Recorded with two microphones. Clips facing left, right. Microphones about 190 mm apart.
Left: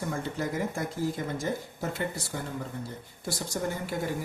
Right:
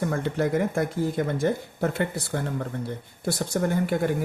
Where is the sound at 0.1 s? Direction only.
60° right (ahead or behind).